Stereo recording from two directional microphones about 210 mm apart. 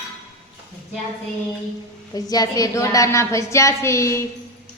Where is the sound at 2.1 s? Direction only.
15° left (ahead or behind).